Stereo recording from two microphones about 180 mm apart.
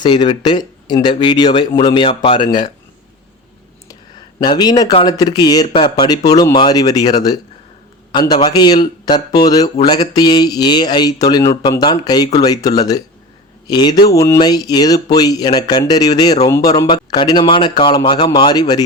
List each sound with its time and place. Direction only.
0.0 s speech: 25° left (ahead or behind)
3.8 s a sound: 25° left (ahead or behind)
5.0 s speech: 20° left (ahead or behind)